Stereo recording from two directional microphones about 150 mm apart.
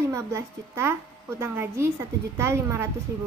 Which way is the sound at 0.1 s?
20° right (ahead or behind).